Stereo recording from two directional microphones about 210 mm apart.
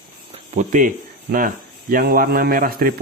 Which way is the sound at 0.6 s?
40° right (ahead or behind).